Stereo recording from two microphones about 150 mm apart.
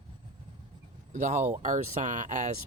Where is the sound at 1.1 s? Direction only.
50° right (ahead or behind).